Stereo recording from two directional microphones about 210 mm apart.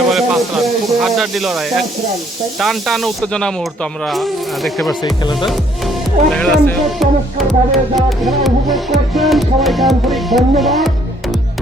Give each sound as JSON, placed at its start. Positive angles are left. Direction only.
{"t": 0.1, "sound": "music", "side_deg": 0}
{"t": 2.6, "sound": "speech", "side_deg": 0}
{"t": 5.2, "sound": "speech", "side_deg": 20}
{"t": 6.3, "sound": "speech", "side_deg": 5}
{"t": 8.4, "sound": "music", "side_deg": 0}